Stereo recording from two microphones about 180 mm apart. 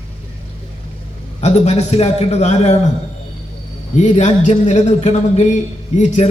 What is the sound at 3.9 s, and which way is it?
A man's voice, 40° left (ahead or behind).